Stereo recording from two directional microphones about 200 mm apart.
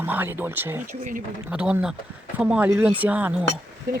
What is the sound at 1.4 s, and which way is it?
Speech, 5° right (ahead or behind).